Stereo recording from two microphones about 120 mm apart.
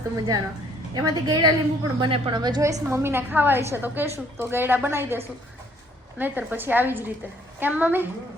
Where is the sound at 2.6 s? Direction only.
25° right (ahead or behind).